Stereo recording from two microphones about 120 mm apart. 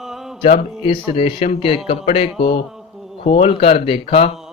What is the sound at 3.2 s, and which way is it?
Speech, 65° left (ahead or behind).